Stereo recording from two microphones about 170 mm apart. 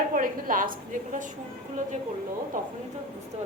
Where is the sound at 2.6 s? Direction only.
50° right (ahead or behind).